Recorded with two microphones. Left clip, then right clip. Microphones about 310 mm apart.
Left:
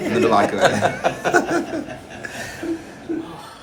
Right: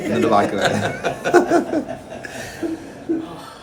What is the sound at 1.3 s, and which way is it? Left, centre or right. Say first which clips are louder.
Chuckle: right 6 dB; centre.